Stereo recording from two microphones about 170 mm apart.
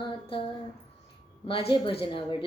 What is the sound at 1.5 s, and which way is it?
Music, 35° left (ahead or behind).